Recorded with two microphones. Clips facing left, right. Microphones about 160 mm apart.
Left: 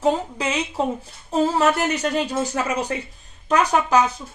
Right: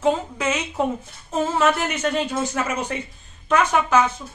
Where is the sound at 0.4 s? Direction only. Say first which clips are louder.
Even; 30° left (ahead or behind).